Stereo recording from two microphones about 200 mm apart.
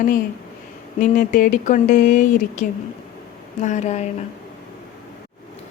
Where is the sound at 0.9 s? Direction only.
40° left (ahead or behind).